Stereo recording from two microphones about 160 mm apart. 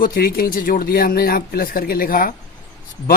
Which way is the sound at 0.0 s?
70° left (ahead or behind).